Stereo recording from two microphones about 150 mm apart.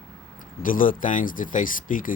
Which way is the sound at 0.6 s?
65° left (ahead or behind).